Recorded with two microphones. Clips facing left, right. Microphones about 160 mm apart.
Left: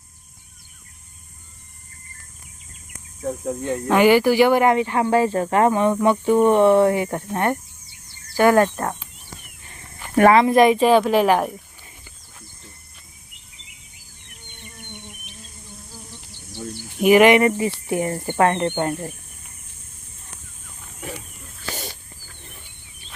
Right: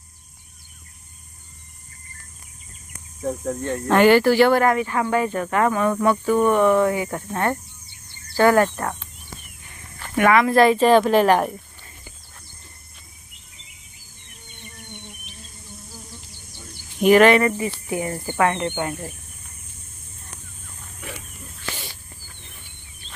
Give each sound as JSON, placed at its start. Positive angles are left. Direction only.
{"t": 3.2, "sound": "a woman's voice", "side_deg": 5}
{"t": 10.2, "sound": "speech", "side_deg": 30}
{"t": 10.5, "sound": "a woman's voice", "side_deg": 15}
{"t": 17.0, "sound": "a woman's voice", "side_deg": 10}